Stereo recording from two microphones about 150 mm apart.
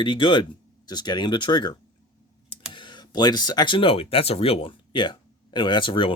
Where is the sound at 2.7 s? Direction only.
30° left (ahead or behind).